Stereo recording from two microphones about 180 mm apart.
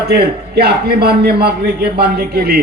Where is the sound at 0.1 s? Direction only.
60° right (ahead or behind).